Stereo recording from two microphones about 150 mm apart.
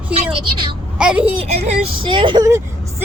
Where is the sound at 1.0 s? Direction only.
5° right (ahead or behind).